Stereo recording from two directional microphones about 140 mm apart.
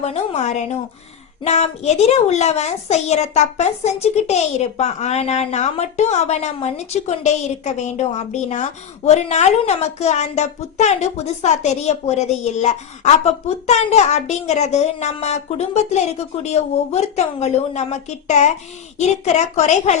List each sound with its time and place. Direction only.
0.0 s a child's voice: 50° left (ahead or behind)